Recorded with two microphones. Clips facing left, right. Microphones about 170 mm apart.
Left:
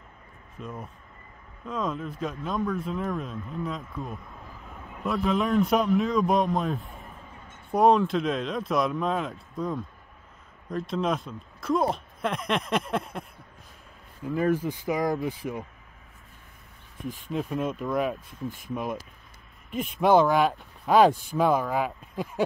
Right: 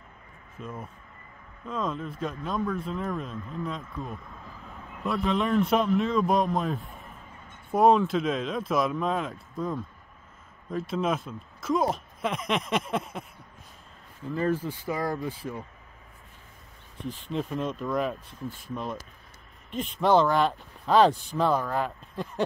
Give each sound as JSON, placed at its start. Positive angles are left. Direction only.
{"t": 0.6, "sound": "speech", "side_deg": 0}
{"t": 14.2, "sound": "speech", "side_deg": 15}
{"t": 17.1, "sound": "speech", "side_deg": 5}